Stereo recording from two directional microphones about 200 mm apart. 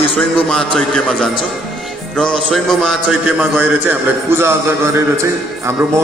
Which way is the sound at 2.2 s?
Centre (ahead or behind).